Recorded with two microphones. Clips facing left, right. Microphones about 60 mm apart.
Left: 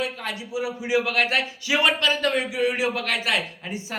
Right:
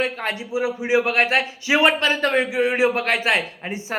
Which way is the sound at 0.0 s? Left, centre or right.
Right.